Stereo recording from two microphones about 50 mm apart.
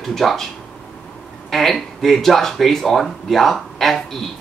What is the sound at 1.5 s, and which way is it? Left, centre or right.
Speech, centre.